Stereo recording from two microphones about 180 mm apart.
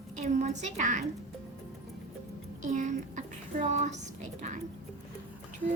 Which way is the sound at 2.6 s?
40° right (ahead or behind).